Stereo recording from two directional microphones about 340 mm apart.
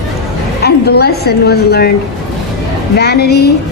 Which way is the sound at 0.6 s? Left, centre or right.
Left.